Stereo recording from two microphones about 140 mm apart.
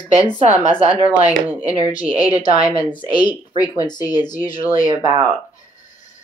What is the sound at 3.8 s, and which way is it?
Speech, 30° left (ahead or behind).